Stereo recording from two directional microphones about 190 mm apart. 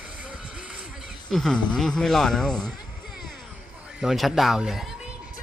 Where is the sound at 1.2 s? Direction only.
5° left (ahead or behind).